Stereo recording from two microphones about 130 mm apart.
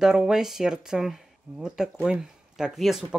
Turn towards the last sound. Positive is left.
turn(degrees=0)  # may be behind; listen again after turning